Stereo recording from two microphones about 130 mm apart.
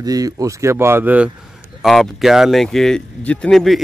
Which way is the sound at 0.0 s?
30° right (ahead or behind).